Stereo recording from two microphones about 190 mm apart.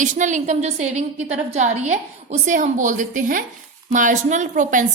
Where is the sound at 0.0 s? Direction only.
40° right (ahead or behind).